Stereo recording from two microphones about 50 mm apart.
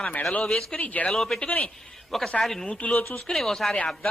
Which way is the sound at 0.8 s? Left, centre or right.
Left.